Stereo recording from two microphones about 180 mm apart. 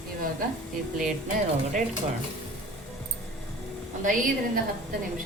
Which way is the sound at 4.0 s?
45° right (ahead or behind).